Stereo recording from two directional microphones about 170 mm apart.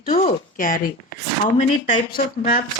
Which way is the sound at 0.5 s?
55° left (ahead or behind).